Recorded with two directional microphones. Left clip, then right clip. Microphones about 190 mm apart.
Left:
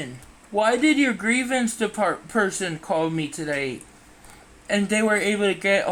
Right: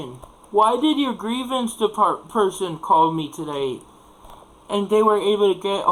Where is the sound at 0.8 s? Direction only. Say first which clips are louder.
Left 1 dB; 5° left (ahead or behind).